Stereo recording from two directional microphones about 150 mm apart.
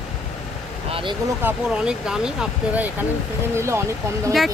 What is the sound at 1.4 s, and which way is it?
Speech, 5° right (ahead or behind).